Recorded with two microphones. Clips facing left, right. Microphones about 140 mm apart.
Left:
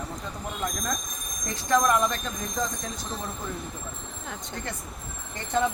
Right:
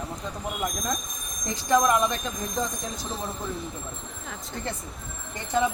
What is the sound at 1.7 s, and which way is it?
Speech, 20° right (ahead or behind).